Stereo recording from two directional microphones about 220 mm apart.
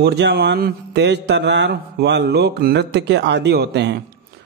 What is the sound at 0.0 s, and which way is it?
Speech, 50° right (ahead or behind).